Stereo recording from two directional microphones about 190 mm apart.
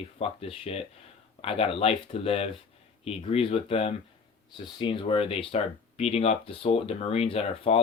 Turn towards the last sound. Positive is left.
turn(degrees=30)  # may be behind; listen again after turning